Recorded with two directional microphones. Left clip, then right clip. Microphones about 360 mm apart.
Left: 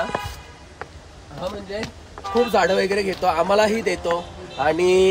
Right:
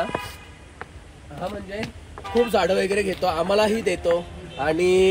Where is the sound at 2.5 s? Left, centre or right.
Centre.